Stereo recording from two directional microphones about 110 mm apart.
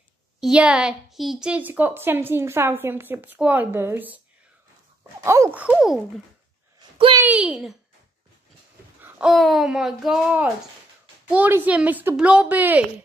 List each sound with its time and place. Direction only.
0.4 s a woman's voice: 10° right (ahead or behind)
5.2 s speech: 30° right (ahead or behind)
5.5 s a woman's voice: 15° right (ahead or behind)
5.8 s speech: centre (ahead or behind)
6.8 s a sound: 45° right (ahead or behind)
7.2 s a woman's voice: 10° right (ahead or behind)
9.2 s speech: centre (ahead or behind)
11.2 s a woman's voice: 15° right (ahead or behind)